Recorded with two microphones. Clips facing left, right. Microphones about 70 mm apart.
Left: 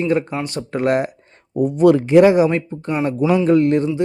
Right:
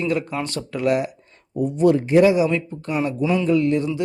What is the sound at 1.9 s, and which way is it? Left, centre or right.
Speech, left.